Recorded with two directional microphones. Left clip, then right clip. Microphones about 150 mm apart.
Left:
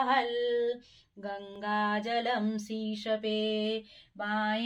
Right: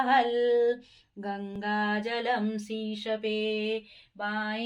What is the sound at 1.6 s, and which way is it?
Female singing, 20° right (ahead or behind).